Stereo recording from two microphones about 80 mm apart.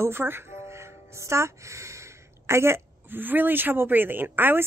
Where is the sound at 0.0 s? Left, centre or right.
Right.